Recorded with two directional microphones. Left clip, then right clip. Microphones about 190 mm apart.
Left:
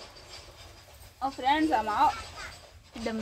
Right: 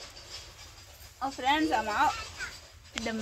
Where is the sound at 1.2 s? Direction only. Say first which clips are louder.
Left 1 dB; centre (ahead or behind).